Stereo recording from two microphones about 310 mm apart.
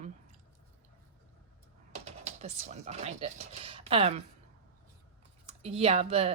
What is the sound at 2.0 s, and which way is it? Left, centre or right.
Speech, right.